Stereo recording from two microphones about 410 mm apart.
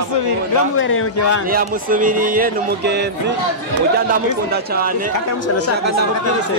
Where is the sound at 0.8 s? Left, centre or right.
Left.